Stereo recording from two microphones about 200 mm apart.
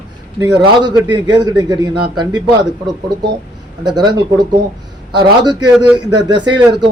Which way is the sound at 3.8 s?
20° right (ahead or behind).